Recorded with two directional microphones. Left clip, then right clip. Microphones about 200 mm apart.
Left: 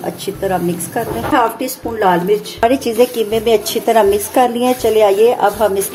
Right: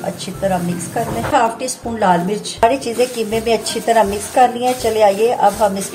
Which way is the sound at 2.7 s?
40° left (ahead or behind).